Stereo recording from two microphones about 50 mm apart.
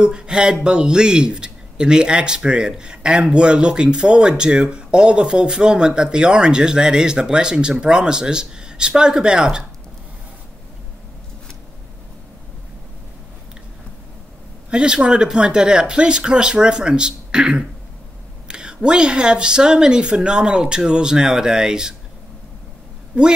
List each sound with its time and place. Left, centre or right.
0.0 s speech: centre
14.7 s speech: centre